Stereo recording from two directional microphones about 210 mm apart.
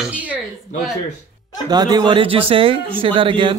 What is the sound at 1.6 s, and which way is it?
Speech, 20° right (ahead or behind).